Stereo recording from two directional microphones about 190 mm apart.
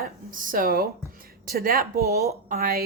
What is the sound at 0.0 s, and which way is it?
A woman's voice, 45° right (ahead or behind).